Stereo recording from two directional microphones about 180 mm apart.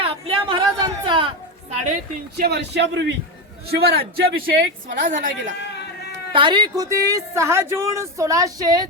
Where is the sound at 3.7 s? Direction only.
60° right (ahead or behind).